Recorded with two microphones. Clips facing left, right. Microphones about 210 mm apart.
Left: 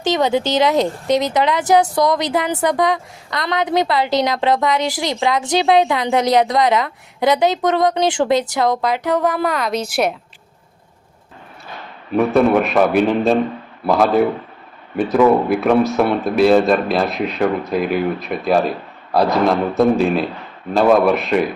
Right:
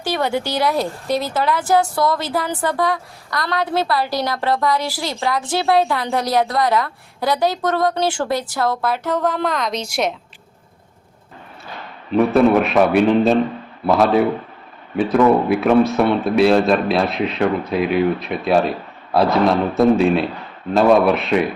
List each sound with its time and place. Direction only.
0.0 s a woman's voice: 20° left (ahead or behind)
12.1 s speech: centre (ahead or behind)